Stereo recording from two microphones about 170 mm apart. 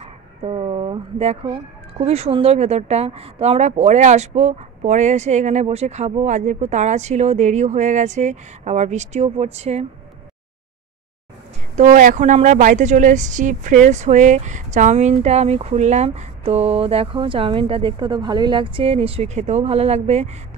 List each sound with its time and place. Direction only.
0.0 s speech: 35° right (ahead or behind)
11.7 s speech: 45° right (ahead or behind)